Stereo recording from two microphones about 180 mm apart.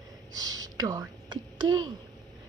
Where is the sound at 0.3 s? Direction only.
20° right (ahead or behind).